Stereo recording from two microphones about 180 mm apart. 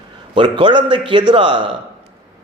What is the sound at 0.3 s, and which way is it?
A man's voice, 25° right (ahead or behind).